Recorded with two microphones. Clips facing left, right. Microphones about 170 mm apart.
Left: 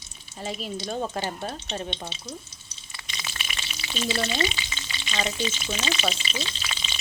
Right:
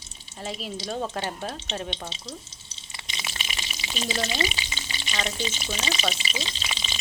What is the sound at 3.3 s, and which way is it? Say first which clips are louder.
Frying: right 1 dB; 25° right (ahead or behind).